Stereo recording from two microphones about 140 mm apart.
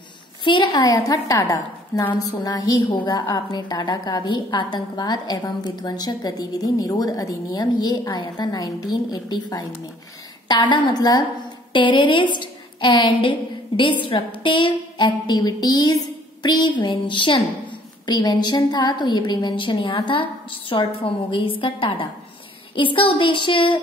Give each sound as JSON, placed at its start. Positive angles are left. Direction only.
{"t": 0.4, "sound": "a woman's voice", "side_deg": 35}